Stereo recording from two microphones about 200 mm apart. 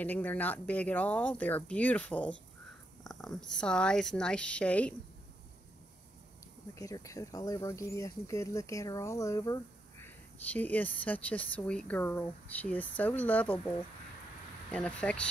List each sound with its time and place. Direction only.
0.0 s speech: 10° left (ahead or behind)
6.7 s speech: 15° left (ahead or behind)